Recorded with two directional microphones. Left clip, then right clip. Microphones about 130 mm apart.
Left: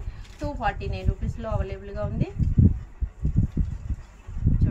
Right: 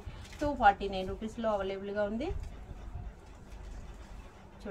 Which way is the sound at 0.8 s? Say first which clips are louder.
Even; 15° right (ahead or behind).